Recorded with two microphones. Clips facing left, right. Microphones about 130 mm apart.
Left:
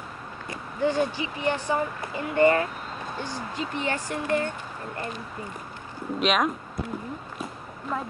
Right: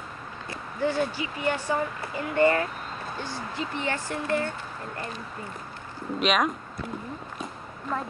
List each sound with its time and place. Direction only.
0.5 s speech: 15° left (ahead or behind)
6.1 s speech: centre (ahead or behind)
7.9 s speech: 5° left (ahead or behind)